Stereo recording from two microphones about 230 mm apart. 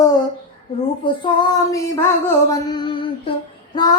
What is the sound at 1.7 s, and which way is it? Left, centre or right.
Female singing, centre.